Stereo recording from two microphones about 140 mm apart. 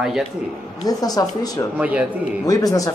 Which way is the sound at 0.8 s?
25° left (ahead or behind).